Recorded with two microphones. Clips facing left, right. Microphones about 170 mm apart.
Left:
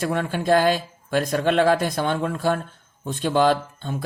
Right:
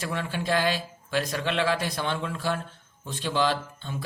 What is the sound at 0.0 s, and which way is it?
Speech, 50° left (ahead or behind).